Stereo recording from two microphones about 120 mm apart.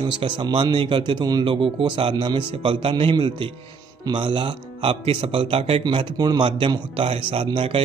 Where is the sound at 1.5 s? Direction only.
45° right (ahead or behind).